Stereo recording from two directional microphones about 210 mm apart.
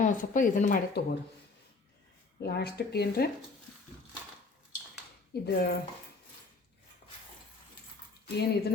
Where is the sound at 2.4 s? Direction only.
50° left (ahead or behind).